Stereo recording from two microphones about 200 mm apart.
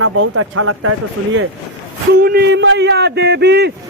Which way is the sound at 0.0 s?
90° right.